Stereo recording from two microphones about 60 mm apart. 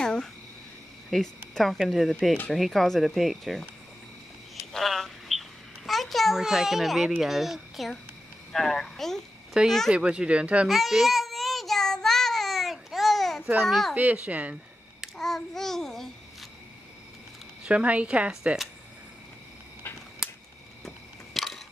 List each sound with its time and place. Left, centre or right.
0.0 s a sound: centre
1.1 s speech: centre
4.7 s a sound: centre
5.9 s a child's voice: centre
9.9 s speech: centre
10.7 s child singing: centre
13.6 s speech: centre
13.9 s speech: right
15.1 s a child's voice: centre
17.6 s speech: right
20.8 s a sound: centre